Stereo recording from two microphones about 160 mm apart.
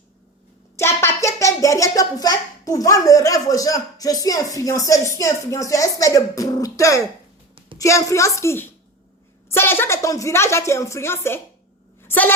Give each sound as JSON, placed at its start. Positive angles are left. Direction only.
{"t": 0.8, "sound": "a child's voice", "side_deg": 15}